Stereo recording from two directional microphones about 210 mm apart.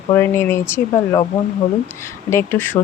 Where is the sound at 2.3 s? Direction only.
10° left (ahead or behind).